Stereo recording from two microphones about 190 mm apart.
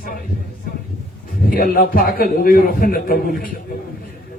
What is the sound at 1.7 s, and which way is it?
A man's voice, 50° left (ahead or behind).